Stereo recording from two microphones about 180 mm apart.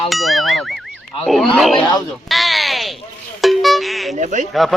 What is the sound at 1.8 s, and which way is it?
Speech, 25° left (ahead or behind).